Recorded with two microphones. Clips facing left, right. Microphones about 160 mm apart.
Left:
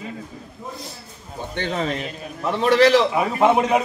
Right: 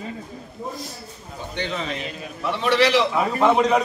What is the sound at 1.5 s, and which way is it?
A man's voice, 45° left (ahead or behind).